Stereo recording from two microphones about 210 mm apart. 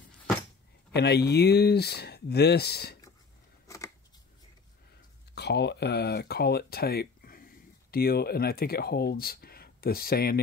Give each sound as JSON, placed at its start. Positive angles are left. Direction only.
{"t": 0.9, "sound": "speech", "side_deg": 50}
{"t": 3.6, "sound": "a sound", "side_deg": 15}
{"t": 5.3, "sound": "speech", "side_deg": 50}